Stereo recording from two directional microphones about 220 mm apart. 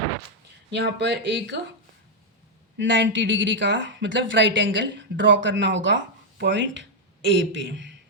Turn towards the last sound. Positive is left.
turn(degrees=-55)  # may be behind; listen again after turning